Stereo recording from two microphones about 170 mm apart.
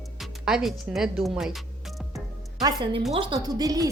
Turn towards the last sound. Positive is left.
turn(degrees=-20)  # may be behind; listen again after turning